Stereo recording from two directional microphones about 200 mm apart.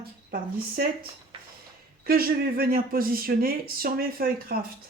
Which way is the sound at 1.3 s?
25° right (ahead or behind).